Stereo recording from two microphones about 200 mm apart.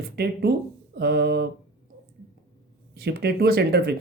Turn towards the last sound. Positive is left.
turn(degrees=-55)  # may be behind; listen again after turning